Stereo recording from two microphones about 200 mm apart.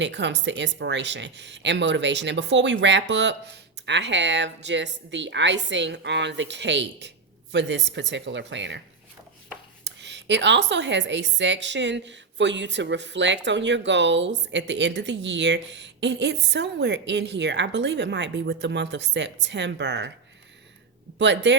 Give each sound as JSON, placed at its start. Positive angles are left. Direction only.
{"t": 0.0, "sound": "speech", "side_deg": -60}
{"t": 9.8, "sound": "speech", "side_deg": -60}
{"t": 21.2, "sound": "speech", "side_deg": -60}